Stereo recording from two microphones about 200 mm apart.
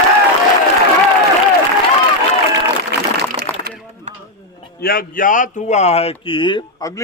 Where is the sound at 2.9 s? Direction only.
55° right (ahead or behind).